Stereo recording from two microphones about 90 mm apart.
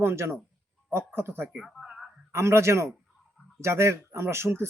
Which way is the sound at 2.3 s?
30° right (ahead or behind).